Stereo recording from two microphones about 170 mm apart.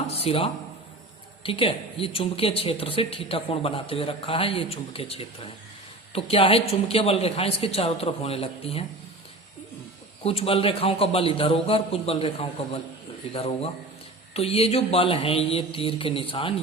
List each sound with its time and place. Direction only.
0.2 s a woman's voice: 35° left (ahead or behind)
10.2 s a woman's voice: 35° left (ahead or behind)